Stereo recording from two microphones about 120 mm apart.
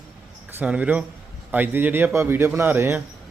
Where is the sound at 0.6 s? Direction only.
10° right (ahead or behind).